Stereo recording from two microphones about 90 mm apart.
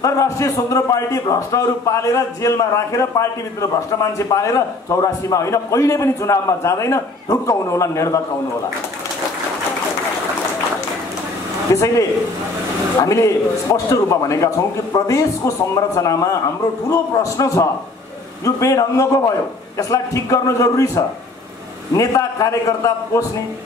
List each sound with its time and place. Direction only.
0.0 s a man's voice: 35° left (ahead or behind)
11.7 s a man's voice: 35° left (ahead or behind)